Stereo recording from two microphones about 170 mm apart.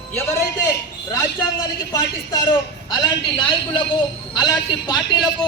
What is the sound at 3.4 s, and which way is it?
A man's voice, 30° left (ahead or behind).